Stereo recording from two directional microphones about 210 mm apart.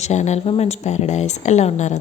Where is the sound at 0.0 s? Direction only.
35° left (ahead or behind).